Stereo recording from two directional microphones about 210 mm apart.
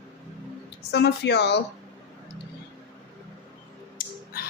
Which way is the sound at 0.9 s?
55° left (ahead or behind).